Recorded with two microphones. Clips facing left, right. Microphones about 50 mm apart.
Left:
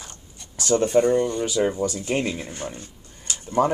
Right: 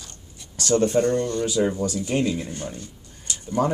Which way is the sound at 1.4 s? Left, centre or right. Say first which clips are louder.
Even; left.